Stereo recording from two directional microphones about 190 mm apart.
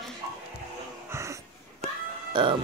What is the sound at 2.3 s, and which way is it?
Music, 25° right (ahead or behind).